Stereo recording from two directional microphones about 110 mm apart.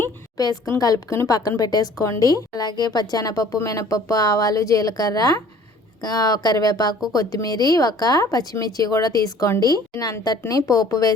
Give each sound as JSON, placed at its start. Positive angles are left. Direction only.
{"t": 0.3, "sound": "speech", "side_deg": 35}